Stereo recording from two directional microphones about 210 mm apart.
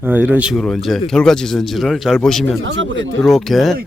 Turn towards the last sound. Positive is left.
turn(degrees=0)  # may be behind; listen again after turning